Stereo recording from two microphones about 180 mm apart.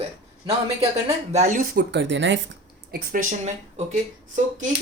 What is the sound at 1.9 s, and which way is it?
Speech, 90° right.